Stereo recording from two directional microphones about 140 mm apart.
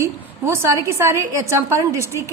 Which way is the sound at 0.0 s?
20° right (ahead or behind).